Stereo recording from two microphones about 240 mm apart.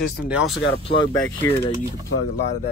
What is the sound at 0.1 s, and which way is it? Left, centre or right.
Speech, centre.